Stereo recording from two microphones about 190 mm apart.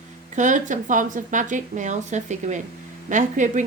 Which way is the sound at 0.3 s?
40° right (ahead or behind).